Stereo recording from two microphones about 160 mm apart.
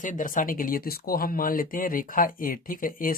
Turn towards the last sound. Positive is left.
turn(degrees=60)  # may be behind; listen again after turning